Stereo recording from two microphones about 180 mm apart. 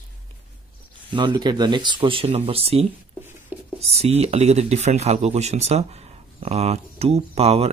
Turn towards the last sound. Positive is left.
turn(degrees=-35)  # may be behind; listen again after turning